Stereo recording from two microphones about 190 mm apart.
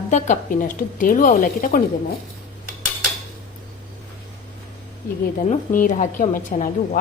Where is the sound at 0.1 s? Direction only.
40° left (ahead or behind).